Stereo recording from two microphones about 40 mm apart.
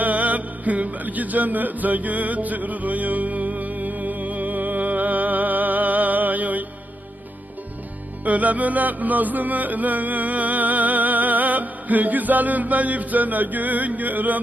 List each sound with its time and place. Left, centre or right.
0.0 s music: right
8.2 s music: right